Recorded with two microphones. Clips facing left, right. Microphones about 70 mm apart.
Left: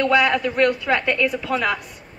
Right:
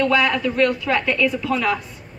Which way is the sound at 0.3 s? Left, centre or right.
Left.